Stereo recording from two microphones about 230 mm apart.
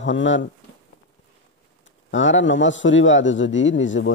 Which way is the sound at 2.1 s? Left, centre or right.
Left.